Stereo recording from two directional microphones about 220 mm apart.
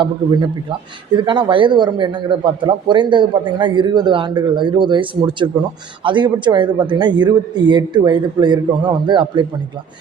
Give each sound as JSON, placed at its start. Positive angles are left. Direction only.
{"t": 0.0, "sound": "a man's voice", "side_deg": -20}